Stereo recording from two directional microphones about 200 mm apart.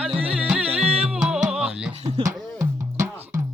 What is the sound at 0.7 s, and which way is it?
Music, 30° right (ahead or behind).